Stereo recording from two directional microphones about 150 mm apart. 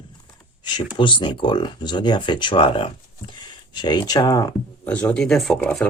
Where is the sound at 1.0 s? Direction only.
35° left (ahead or behind).